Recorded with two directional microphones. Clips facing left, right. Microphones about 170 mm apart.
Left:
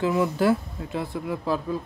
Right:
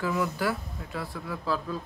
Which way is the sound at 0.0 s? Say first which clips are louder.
Left 6 dB; 25° left (ahead or behind).